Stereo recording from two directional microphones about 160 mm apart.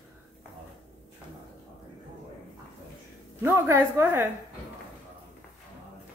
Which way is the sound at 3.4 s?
15° right (ahead or behind).